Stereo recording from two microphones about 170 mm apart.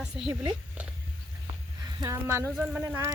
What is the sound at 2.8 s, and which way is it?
Speech, 15° right (ahead or behind).